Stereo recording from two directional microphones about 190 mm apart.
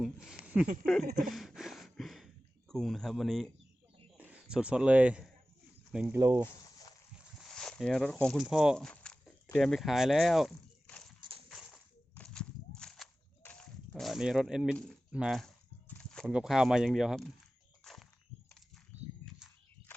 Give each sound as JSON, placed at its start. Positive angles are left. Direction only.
{"t": 0.0, "sound": "speech", "side_deg": -5}
{"t": 6.1, "sound": "speech", "side_deg": -15}
{"t": 7.3, "sound": "a sound", "side_deg": 5}